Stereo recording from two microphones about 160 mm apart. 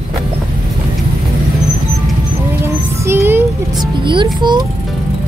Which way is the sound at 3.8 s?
30° right (ahead or behind).